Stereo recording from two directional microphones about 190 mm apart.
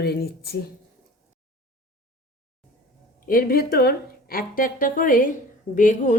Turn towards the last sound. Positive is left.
turn(degrees=40)  # may be behind; listen again after turning